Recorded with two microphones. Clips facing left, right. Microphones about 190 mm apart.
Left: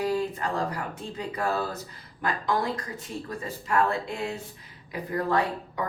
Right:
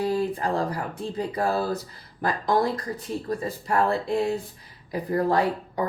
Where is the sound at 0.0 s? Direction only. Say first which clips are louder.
Right 3 dB; 35° right (ahead or behind).